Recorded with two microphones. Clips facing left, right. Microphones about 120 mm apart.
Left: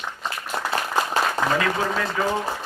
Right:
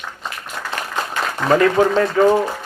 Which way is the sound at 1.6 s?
40° right (ahead or behind).